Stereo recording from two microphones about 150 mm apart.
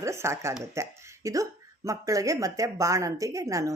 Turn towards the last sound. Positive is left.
turn(degrees=-20)  # may be behind; listen again after turning